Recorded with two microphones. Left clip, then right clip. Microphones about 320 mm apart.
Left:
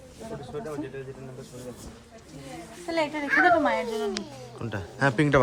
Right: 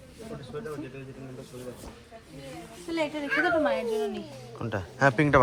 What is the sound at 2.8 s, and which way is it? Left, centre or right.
Speech, centre.